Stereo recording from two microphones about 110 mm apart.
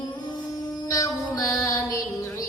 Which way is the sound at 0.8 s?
30° left (ahead or behind).